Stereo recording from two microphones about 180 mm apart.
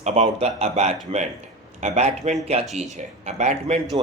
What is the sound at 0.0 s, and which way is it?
Speech, 40° right (ahead or behind).